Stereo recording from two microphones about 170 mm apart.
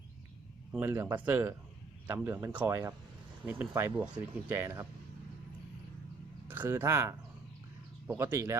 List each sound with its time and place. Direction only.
0.7 s speech: 10° right (ahead or behind)
6.5 s speech: 10° right (ahead or behind)